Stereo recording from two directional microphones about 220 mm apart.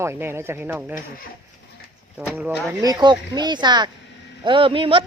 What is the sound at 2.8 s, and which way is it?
Speech, 20° right (ahead or behind).